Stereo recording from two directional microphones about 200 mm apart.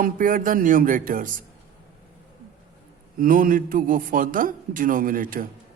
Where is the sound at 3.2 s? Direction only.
45° right (ahead or behind).